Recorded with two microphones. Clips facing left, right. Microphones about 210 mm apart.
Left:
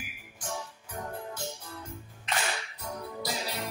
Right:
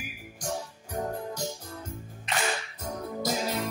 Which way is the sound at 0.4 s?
40° right (ahead or behind).